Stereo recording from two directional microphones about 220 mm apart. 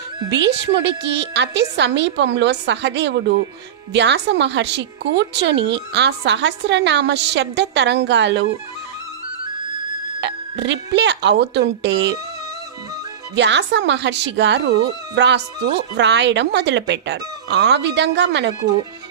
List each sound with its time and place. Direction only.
0.3 s speech: 55° right (ahead or behind)
10.2 s speech: 55° right (ahead or behind)
13.3 s speech: 55° right (ahead or behind)